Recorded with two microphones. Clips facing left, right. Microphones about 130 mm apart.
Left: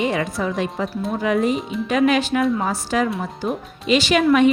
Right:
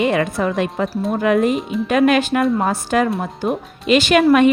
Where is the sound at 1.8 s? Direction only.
55° right (ahead or behind).